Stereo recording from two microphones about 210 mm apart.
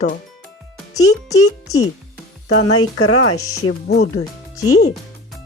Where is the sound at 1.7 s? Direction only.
15° left (ahead or behind).